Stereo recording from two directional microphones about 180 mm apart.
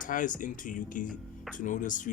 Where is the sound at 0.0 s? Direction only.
45° left (ahead or behind).